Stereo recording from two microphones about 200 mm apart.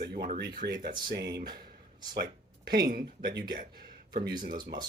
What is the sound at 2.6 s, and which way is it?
A man's voice, 50° right (ahead or behind).